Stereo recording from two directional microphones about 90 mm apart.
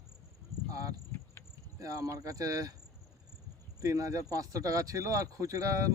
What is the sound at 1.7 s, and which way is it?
Speech, 40° right (ahead or behind).